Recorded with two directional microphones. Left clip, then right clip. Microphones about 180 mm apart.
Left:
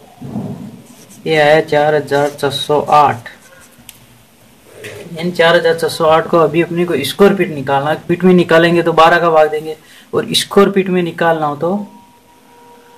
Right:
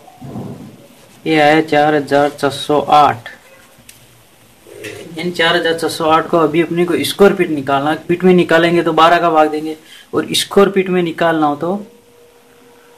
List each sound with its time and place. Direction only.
1.2 s speech: 20° right (ahead or behind)
5.1 s speech: 10° right (ahead or behind)